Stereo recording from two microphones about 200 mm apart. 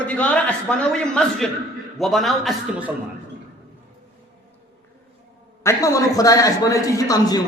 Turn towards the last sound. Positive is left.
turn(degrees=20)  # may be behind; listen again after turning